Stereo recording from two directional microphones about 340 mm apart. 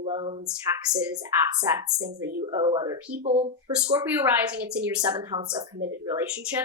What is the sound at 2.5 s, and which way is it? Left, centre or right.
Speech, centre.